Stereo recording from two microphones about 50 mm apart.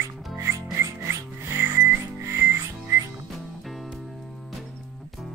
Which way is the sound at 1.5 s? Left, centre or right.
Right.